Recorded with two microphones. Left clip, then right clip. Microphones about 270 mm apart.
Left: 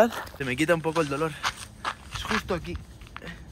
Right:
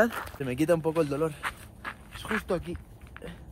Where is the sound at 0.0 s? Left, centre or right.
Centre.